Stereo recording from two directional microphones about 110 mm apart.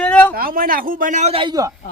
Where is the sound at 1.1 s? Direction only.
90° right.